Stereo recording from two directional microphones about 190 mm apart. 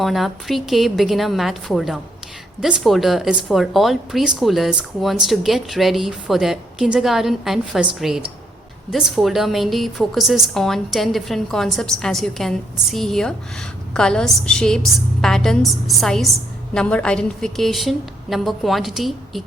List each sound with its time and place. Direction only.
0.0 s a woman's voice: centre (ahead or behind)